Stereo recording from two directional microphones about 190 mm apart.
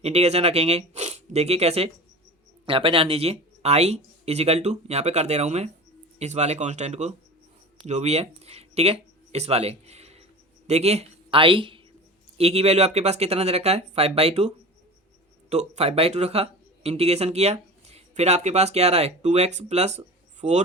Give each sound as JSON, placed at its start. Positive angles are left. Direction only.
{"t": 0.0, "sound": "speech", "side_deg": -35}